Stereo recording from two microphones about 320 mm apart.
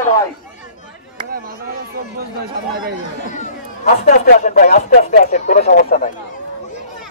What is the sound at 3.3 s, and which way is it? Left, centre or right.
Speech, left.